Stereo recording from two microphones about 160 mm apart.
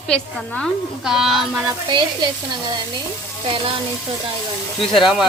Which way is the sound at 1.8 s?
30° right (ahead or behind).